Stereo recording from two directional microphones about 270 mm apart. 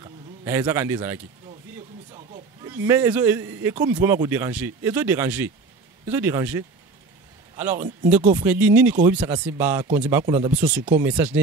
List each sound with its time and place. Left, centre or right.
0.0 s a man's voice: centre
2.1 s a sound: centre
2.7 s speech: centre